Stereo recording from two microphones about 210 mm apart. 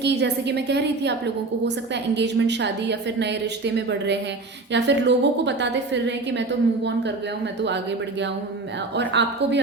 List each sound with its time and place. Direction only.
0.0 s a woman's voice: 55° right (ahead or behind)
2.1 s a woman's voice: 55° right (ahead or behind)
9.0 s a woman's voice: 55° right (ahead or behind)